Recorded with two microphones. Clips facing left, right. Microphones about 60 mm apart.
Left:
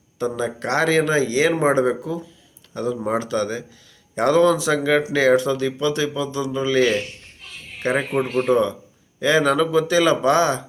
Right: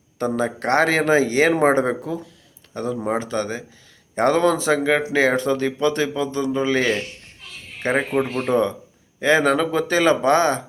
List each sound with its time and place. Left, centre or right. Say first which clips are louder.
0.2 s a man's voice: right 1 dB; right
8.2 s speech: left 2 dB; centre
9.2 s a man's voice: even; right